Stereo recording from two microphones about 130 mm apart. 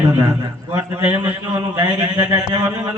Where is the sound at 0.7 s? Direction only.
15° right (ahead or behind).